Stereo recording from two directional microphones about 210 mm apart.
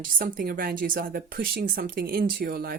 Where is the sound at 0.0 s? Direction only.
45° right (ahead or behind).